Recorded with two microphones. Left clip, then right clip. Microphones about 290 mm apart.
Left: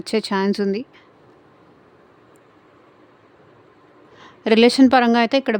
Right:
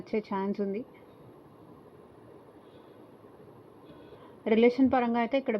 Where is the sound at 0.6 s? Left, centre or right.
Left.